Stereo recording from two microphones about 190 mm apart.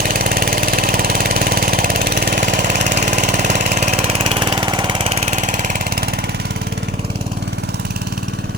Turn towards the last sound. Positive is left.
turn(degrees=-55)  # may be behind; listen again after turning